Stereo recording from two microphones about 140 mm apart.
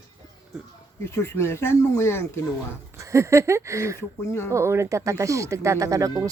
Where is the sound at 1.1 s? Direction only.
20° left (ahead or behind).